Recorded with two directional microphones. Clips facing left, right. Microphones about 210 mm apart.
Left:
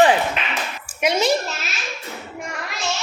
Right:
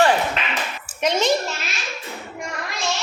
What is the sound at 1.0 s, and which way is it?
Speech, 10° left (ahead or behind).